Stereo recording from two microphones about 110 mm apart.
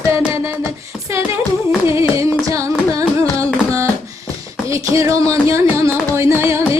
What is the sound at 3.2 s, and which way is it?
Carnatic music, 30° right (ahead or behind).